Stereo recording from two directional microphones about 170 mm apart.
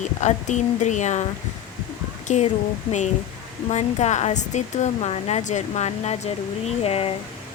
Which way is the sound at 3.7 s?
40° left (ahead or behind).